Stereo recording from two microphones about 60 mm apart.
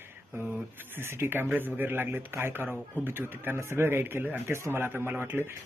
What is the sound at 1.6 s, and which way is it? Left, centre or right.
A man's voice, right.